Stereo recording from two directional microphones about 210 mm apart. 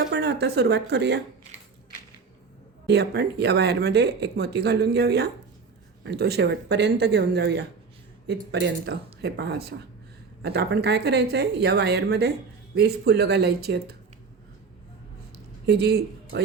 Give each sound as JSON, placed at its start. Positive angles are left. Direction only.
{"t": 0.1, "sound": "speech", "side_deg": -50}
{"t": 2.8, "sound": "speech", "side_deg": -50}
{"t": 15.6, "sound": "speech", "side_deg": -50}